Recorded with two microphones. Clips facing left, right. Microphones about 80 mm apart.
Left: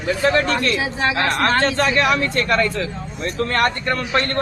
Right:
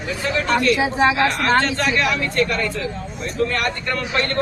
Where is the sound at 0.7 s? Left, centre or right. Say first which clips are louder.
Right 4 dB; right.